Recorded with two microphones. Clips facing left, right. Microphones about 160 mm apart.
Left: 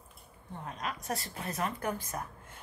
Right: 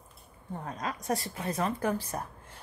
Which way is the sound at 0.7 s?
35° right (ahead or behind).